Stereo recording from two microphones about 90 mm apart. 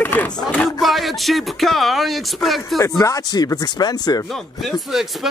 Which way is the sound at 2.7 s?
40° left (ahead or behind).